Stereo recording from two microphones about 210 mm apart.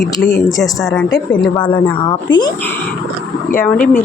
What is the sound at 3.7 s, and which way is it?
Speech, 40° left (ahead or behind).